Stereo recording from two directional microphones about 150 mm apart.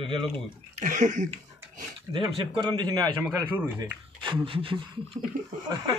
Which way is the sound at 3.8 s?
30° right (ahead or behind).